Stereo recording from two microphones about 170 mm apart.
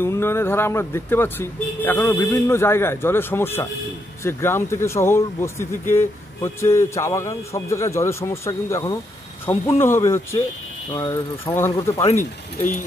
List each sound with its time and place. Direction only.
0.0 s speech: 15° left (ahead or behind)